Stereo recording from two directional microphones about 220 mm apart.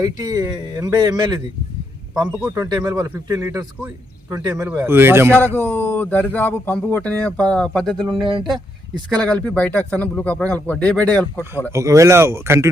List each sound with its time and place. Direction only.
0.0 s speech: 15° right (ahead or behind)
2.2 s speech: 5° right (ahead or behind)
2.6 s speech: 15° right (ahead or behind)
5.5 s speech: 10° left (ahead or behind)
9.1 s speech: 5° left (ahead or behind)
11.7 s speech: 15° right (ahead or behind)